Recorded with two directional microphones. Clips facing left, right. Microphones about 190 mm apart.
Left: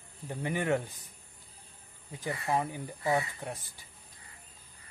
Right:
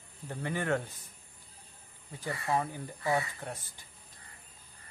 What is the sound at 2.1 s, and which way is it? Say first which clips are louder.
Speech: left 1 dB; 15° left (ahead or behind).